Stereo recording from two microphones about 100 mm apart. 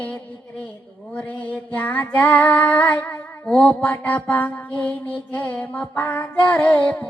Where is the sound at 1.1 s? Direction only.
15° left (ahead or behind).